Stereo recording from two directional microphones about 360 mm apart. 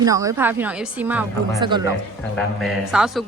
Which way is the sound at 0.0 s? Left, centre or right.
Centre.